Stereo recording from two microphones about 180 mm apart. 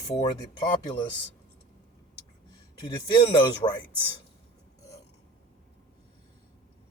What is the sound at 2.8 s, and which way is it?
Speech, 25° left (ahead or behind).